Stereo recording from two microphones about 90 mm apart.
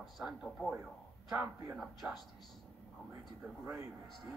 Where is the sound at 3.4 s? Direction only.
20° right (ahead or behind).